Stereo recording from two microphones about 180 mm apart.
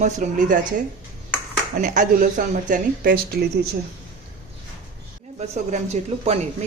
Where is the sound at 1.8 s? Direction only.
45° right (ahead or behind).